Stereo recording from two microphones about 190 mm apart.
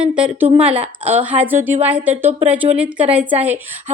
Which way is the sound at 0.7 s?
10° right (ahead or behind).